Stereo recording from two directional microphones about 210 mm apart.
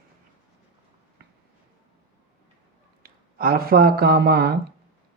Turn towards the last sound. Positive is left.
turn(degrees=-50)  # may be behind; listen again after turning